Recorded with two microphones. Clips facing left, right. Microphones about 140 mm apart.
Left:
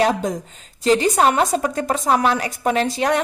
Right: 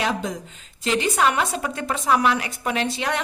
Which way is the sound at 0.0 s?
40° left (ahead or behind).